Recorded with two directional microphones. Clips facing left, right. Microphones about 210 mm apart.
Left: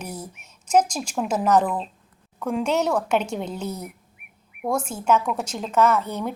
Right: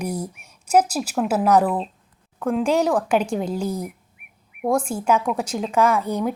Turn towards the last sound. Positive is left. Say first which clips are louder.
# right 1 dB
turn(degrees=-10)  # may be behind; listen again after turning